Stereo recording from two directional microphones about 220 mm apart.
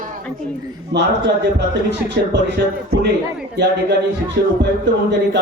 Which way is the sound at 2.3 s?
50° right (ahead or behind).